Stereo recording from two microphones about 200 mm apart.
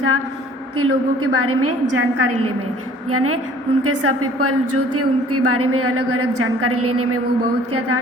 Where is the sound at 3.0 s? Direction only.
90° right.